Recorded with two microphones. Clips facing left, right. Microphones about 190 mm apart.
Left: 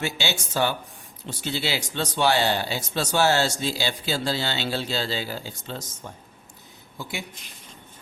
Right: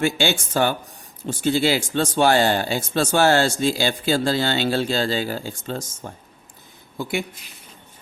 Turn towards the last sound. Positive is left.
turn(degrees=-55)  # may be behind; listen again after turning